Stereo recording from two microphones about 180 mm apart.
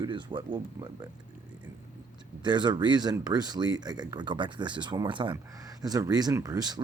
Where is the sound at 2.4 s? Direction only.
25° right (ahead or behind).